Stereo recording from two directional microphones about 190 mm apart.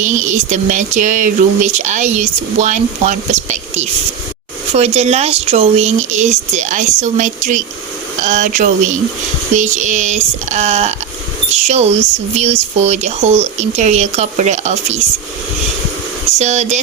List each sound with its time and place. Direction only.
0.0 s speech: 40° right (ahead or behind)
16.4 s speech: 35° right (ahead or behind)